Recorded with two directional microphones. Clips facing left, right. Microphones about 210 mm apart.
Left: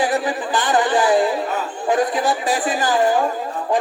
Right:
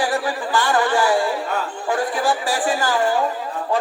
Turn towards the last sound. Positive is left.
turn(degrees=20)  # may be behind; listen again after turning